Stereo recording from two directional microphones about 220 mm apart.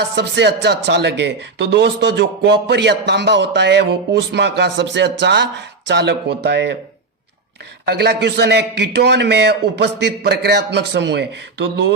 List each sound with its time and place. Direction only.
0.2 s a man's voice: 50° right (ahead or behind)
7.9 s a man's voice: 45° right (ahead or behind)